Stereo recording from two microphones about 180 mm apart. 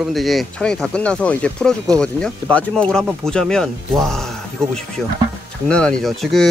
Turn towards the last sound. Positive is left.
turn(degrees=0)  # may be behind; listen again after turning